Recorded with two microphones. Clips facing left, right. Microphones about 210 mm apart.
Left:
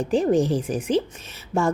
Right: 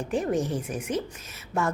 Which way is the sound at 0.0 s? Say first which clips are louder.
Left 7 dB; 30° left (ahead or behind).